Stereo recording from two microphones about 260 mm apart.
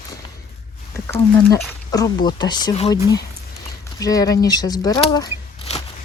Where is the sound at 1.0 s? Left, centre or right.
Centre.